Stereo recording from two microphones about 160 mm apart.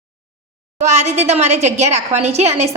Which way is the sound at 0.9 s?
45° right (ahead or behind).